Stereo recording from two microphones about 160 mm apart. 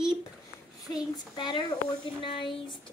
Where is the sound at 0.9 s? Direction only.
30° left (ahead or behind).